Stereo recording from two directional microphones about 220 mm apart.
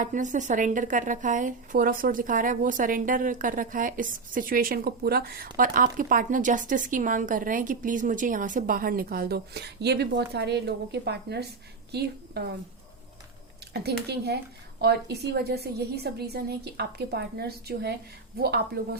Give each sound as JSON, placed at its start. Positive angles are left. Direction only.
{"t": 0.0, "sound": "a woman's voice", "side_deg": -35}
{"t": 11.9, "sound": "a sound", "side_deg": -45}
{"t": 13.7, "sound": "a woman's voice", "side_deg": -50}